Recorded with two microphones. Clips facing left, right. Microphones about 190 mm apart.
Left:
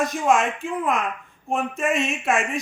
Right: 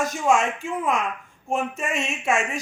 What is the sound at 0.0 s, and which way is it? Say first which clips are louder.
A man's voice: left 1 dB; centre (ahead or behind).